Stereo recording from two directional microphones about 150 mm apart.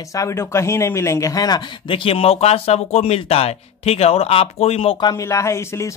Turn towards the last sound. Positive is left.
turn(degrees=20)  # may be behind; listen again after turning